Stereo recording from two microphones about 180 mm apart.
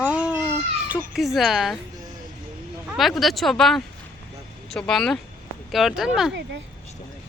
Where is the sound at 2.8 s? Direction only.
Centre (ahead or behind).